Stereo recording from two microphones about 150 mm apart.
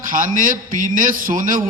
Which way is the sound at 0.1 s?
65° right (ahead or behind).